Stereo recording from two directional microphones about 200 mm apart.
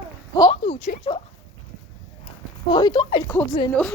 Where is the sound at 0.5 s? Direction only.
35° left (ahead or behind).